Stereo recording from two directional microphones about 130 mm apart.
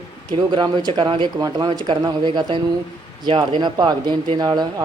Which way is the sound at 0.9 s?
40° right (ahead or behind).